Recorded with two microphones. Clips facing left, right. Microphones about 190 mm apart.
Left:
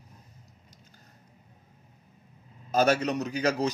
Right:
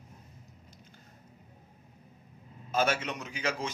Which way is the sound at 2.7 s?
40° left (ahead or behind).